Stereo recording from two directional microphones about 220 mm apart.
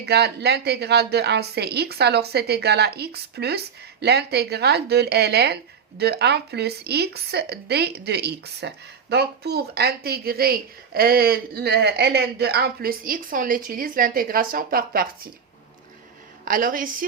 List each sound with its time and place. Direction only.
0.0 s speech: 50° right (ahead or behind)
16.5 s a woman's voice: 40° right (ahead or behind)